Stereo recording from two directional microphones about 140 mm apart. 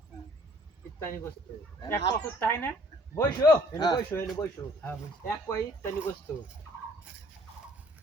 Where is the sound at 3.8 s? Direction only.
30° left (ahead or behind).